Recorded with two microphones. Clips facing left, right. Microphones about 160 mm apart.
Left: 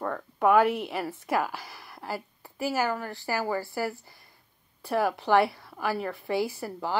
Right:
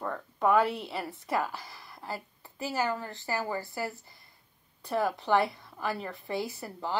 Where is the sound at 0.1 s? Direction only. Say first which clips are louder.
Left 3 dB; 10° left (ahead or behind).